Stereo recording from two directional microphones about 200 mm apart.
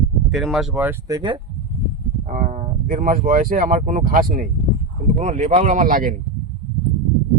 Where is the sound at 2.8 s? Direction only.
45° right (ahead or behind).